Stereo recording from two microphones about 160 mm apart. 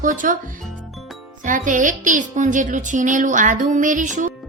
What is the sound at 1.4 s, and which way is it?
Speech, 55° right (ahead or behind).